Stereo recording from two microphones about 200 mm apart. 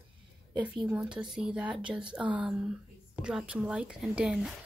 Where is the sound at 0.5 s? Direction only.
5° right (ahead or behind).